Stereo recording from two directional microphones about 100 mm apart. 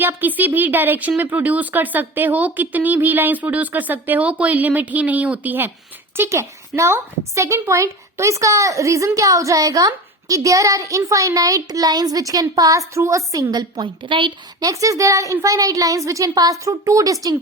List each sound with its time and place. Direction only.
0.0 s a woman's voice: 20° right (ahead or behind); by 14.3 s 55° right (ahead or behind)
14.6 s a woman's voice: 35° right (ahead or behind)